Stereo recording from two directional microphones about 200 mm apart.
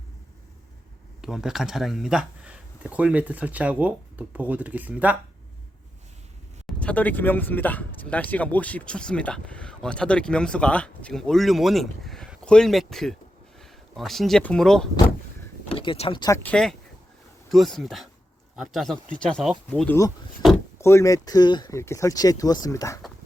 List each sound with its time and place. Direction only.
1.2 s speech: centre (ahead or behind)
6.7 s speech: 5° left (ahead or behind)
15.7 s speech: 25° left (ahead or behind)
16.4 s speech: 5° left (ahead or behind)